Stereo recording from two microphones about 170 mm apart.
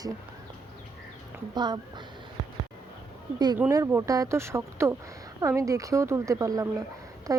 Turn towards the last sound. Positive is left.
turn(degrees=-20)  # may be behind; listen again after turning